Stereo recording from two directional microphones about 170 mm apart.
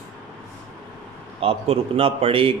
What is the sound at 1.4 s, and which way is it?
Speech, 35° right (ahead or behind).